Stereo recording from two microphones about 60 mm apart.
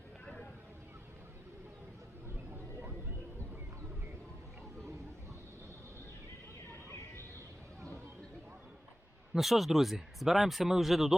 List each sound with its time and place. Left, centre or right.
9.3 s speech: centre